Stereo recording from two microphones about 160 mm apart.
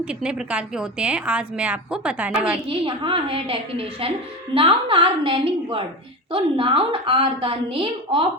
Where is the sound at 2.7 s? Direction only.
30° right (ahead or behind).